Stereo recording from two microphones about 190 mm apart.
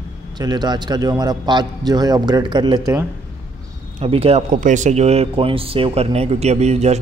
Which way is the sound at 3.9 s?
30° right (ahead or behind).